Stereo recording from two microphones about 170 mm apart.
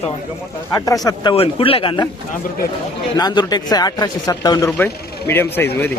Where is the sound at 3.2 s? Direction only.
25° left (ahead or behind).